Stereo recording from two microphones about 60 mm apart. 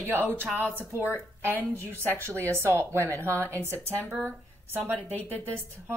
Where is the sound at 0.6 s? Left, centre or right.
Left.